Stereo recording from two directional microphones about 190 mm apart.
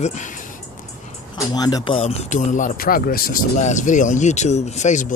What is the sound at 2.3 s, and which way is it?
Speech, 40° left (ahead or behind).